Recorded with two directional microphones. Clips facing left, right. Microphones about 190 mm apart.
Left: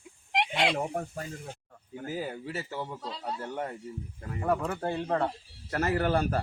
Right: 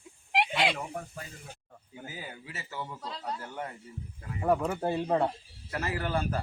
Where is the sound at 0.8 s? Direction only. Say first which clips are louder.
Left 6 dB; 45° left (ahead or behind).